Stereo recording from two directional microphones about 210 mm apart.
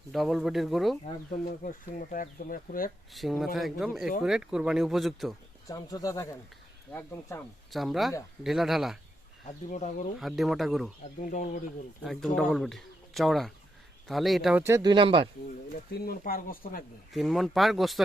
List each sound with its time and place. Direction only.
0.1 s speech: centre (ahead or behind)
1.5 s speech: 40° left (ahead or behind)
3.1 s speech: centre (ahead or behind)
5.6 s speech: 15° left (ahead or behind)
7.7 s speech: centre (ahead or behind)
9.6 s speech: 35° left (ahead or behind)
10.2 s speech: centre (ahead or behind)
11.2 s speech: 35° left (ahead or behind)
12.0 s speech: centre (ahead or behind); by 15.3 s 25° right (ahead or behind)
15.9 s speech: 45° left (ahead or behind)
17.2 s speech: centre (ahead or behind)